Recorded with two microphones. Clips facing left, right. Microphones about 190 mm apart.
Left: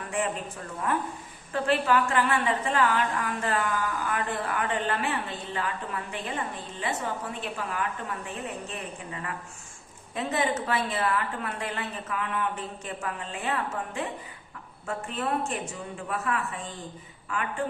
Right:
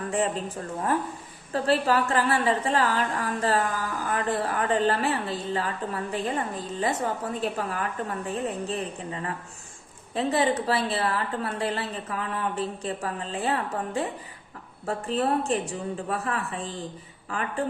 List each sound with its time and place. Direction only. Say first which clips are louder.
0.1 s a woman's voice: right 2 dB; 35° right (ahead or behind)